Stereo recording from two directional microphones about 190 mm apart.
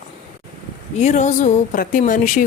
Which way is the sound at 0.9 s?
35° left (ahead or behind).